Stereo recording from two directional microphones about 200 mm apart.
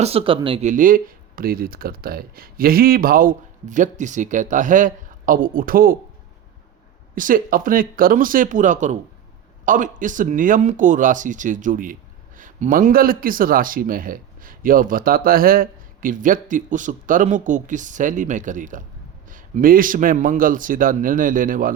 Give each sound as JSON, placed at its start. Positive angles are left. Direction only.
{"t": 0.0, "sound": "speech", "side_deg": -30}
{"t": 0.7, "sound": "speech", "side_deg": -45}
{"t": 7.2, "sound": "speech", "side_deg": -45}